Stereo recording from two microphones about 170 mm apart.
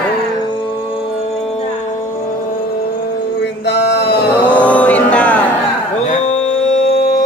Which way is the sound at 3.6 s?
80° left.